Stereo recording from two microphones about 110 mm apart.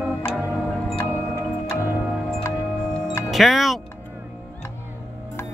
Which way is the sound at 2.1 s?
5° right (ahead or behind).